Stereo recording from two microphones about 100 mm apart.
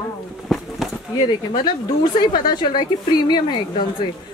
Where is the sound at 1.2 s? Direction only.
45° left (ahead or behind).